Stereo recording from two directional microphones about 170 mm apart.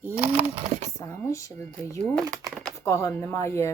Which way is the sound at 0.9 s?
15° left (ahead or behind).